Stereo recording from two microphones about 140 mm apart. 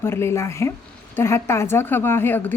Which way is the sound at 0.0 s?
15° left (ahead or behind).